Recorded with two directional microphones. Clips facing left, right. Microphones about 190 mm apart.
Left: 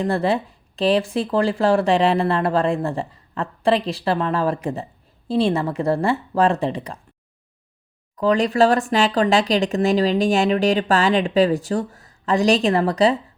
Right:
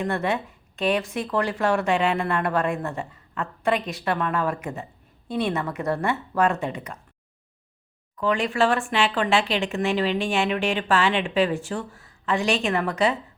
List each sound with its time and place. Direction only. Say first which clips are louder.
0.0 s speech: left 5 dB; 30° left (ahead or behind)
8.1 s speech: left 6 dB; 35° left (ahead or behind)